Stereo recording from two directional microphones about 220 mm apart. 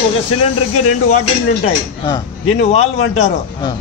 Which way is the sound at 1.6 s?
25° left (ahead or behind).